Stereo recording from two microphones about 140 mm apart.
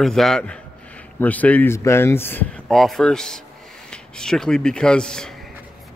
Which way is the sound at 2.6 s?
Centre (ahead or behind).